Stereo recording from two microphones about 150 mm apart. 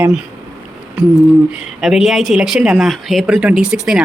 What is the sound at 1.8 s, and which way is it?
A woman's voice, 5° right (ahead or behind).